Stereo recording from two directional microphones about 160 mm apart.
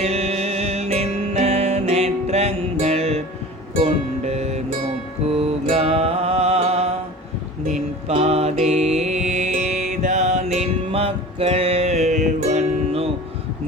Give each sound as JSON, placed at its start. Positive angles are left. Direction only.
{"t": 0.0, "sound": "music", "side_deg": -40}